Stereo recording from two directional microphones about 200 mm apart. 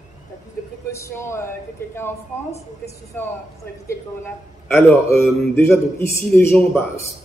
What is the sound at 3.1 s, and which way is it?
Speech, 10° left (ahead or behind).